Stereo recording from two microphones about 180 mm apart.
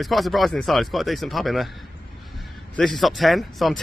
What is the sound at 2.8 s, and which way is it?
A man's voice, centre (ahead or behind).